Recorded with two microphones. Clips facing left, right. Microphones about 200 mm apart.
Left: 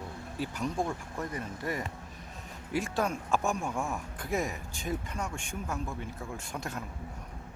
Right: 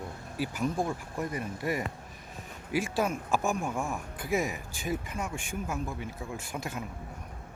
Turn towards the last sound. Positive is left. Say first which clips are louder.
# right 1 dB
turn(degrees=-5)  # may be behind; listen again after turning